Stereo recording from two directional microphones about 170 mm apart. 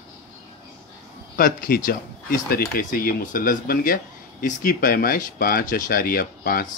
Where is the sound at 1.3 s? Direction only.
55° left (ahead or behind).